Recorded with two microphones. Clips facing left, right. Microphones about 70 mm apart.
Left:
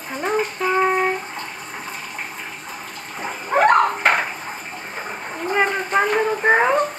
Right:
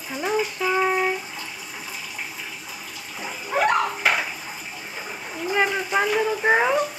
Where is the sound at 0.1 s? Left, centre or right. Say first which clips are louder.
Left 2 dB; left.